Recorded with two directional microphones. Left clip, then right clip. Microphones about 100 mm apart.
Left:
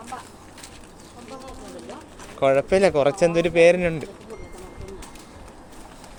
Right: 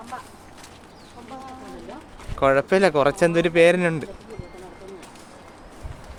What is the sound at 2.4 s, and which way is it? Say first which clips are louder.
Speech: even; 40° right (ahead or behind).